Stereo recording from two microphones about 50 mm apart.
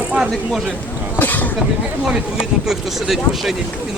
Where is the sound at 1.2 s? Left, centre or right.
Left.